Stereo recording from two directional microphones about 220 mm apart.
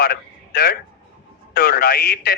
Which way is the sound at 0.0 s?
45° left (ahead or behind).